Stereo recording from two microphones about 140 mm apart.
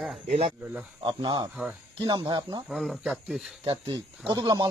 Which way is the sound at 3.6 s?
35° right (ahead or behind).